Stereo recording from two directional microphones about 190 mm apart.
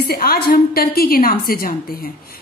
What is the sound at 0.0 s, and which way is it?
A woman's voice, 55° left (ahead or behind).